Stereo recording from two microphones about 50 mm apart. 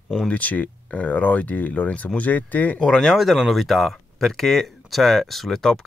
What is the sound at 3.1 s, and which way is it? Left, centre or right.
Speech, centre.